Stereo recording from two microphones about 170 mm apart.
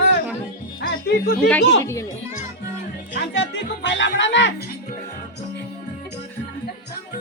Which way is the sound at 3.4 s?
90° left.